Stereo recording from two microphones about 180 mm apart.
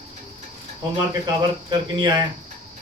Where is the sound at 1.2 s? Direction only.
20° right (ahead or behind).